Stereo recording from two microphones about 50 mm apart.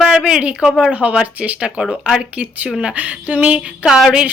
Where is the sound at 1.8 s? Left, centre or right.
Centre.